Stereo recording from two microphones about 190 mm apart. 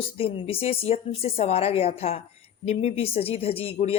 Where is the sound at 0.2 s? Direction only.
30° left (ahead or behind).